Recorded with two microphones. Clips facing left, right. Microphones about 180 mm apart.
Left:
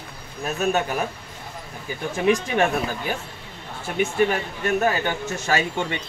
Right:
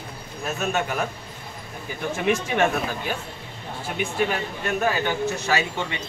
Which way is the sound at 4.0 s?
45° left (ahead or behind).